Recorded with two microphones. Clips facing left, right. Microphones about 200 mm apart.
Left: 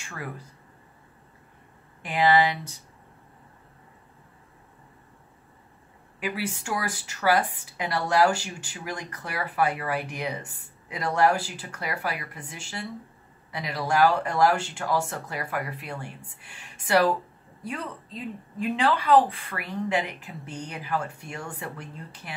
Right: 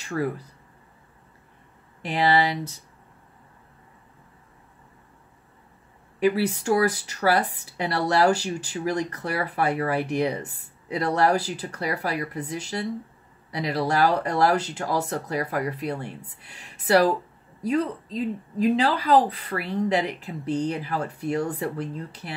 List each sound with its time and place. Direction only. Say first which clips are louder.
0.0 s speech: right 12 dB; 35° right (ahead or behind)
2.0 s speech: even; 35° right (ahead or behind)
6.1 s speech: right 9 dB; 40° right (ahead or behind)